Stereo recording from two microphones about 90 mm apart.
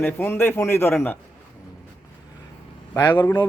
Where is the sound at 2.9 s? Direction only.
20° left (ahead or behind).